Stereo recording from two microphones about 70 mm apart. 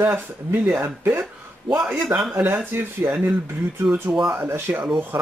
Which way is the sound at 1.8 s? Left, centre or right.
Centre.